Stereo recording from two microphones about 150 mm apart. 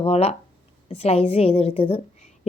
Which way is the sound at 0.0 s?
45° left (ahead or behind).